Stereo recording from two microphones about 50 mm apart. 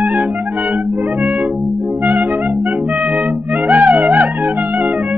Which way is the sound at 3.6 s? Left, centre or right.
Right.